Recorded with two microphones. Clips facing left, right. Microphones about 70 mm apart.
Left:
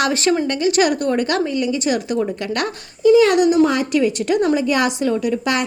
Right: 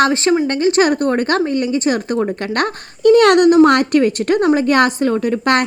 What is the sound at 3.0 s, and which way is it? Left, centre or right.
A child's voice, right.